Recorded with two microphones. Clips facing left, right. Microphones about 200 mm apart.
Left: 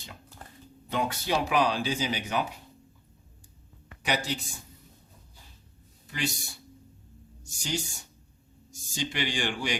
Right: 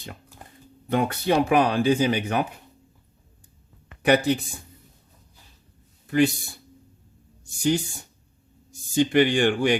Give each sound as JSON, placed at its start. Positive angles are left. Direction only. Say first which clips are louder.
{"t": 0.4, "sound": "a sound", "louder": "right 1 dB", "side_deg": -10}
{"t": 0.9, "sound": "speech", "louder": "right 7 dB", "side_deg": -55}
{"t": 4.0, "sound": "speech", "louder": "right 11 dB", "side_deg": -55}
{"t": 6.1, "sound": "speech", "louder": "right 13 dB", "side_deg": -55}
{"t": 7.4, "sound": "speech", "louder": "right 11 dB", "side_deg": -55}
{"t": 9.0, "sound": "speech", "louder": "right 13 dB", "side_deg": -55}